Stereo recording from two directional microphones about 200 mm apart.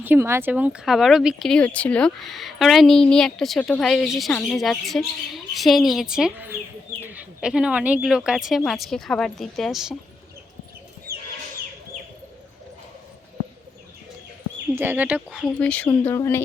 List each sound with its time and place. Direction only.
0.0 s speech: 10° right (ahead or behind)
11.1 s chicken: 50° right (ahead or behind)
14.8 s speech: 10° right (ahead or behind)
15.3 s speech: centre (ahead or behind)